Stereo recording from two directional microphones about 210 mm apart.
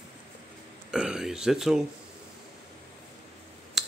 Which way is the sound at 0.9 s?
5° right (ahead or behind).